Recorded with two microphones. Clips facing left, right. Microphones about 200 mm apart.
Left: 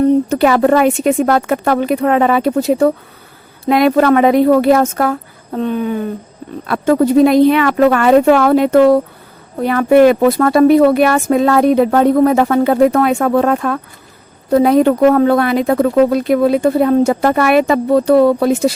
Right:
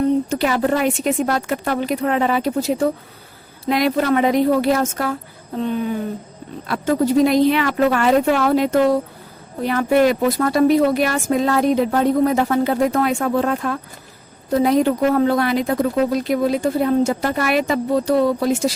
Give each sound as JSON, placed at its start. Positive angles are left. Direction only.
{"t": 0.3, "sound": "speech", "side_deg": 75}
{"t": 1.3, "sound": "a woman's voice", "side_deg": 60}